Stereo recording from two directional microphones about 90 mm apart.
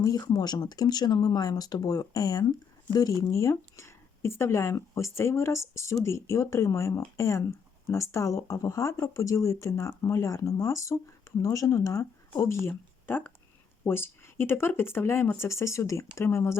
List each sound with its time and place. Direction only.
0.0 s speech: 40° left (ahead or behind)